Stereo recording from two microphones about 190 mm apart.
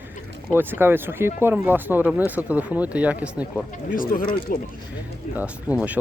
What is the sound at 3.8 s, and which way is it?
Speech, 45° left (ahead or behind).